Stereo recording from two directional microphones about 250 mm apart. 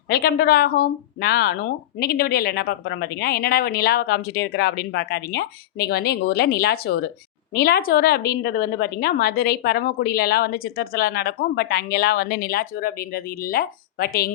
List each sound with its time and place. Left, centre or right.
0.1 s a woman's voice: left